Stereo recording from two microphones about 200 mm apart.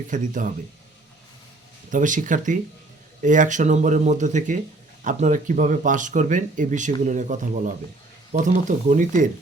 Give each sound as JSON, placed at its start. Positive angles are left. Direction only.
{"t": 0.1, "sound": "speech", "side_deg": -40}
{"t": 1.9, "sound": "speech", "side_deg": -40}